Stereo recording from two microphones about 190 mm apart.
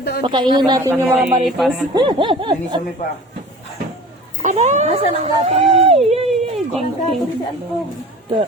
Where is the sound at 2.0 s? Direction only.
25° right (ahead or behind).